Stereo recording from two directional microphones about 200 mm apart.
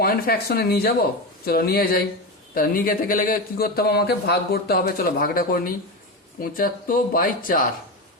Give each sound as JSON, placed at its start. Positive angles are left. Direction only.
{"t": 0.0, "sound": "speech", "side_deg": 50}